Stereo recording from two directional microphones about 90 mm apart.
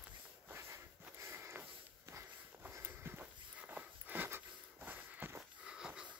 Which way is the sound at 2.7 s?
30° right (ahead or behind).